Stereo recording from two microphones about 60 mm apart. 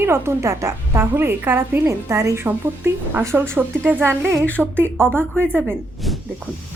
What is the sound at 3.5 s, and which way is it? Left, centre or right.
Speech, right.